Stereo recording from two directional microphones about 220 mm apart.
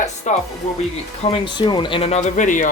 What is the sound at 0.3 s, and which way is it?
Speech, 30° left (ahead or behind).